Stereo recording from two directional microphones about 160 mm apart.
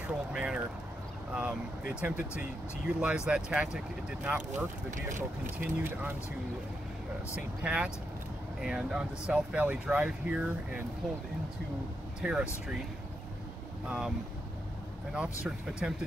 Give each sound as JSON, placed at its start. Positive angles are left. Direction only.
{"t": 0.0, "sound": "speech", "side_deg": -5}
{"t": 5.6, "sound": "speech", "side_deg": -10}
{"t": 7.3, "sound": "speech", "side_deg": -5}
{"t": 12.2, "sound": "speech", "side_deg": -5}
{"t": 13.8, "sound": "speech", "side_deg": -5}
{"t": 15.1, "sound": "speech", "side_deg": -5}